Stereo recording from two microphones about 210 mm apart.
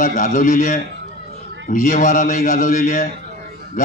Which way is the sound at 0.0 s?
40° left (ahead or behind).